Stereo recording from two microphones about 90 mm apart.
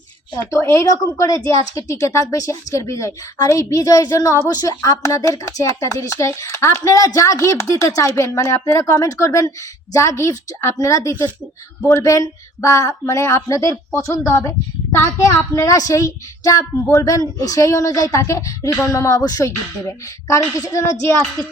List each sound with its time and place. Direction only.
0.3 s a woman's voice: 35° left (ahead or behind)